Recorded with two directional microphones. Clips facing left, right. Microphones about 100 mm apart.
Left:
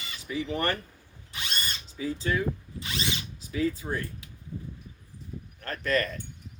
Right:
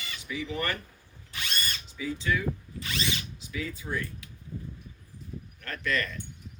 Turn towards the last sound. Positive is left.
turn(degrees=40)  # may be behind; listen again after turning